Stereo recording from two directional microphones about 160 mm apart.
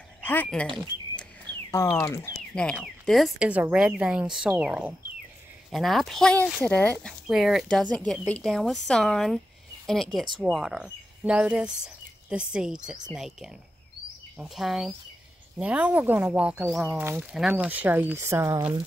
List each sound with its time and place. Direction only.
0.2 s speech: 10° left (ahead or behind)
1.5 s a sound: 30° right (ahead or behind)
1.9 s speech: 15° left (ahead or behind); by 18.8 s 15° right (ahead or behind)